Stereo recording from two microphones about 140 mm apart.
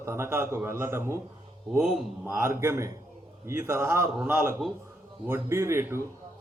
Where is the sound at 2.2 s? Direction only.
15° right (ahead or behind).